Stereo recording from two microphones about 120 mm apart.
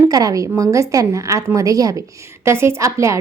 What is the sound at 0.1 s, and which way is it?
A woman's voice, 30° right (ahead or behind).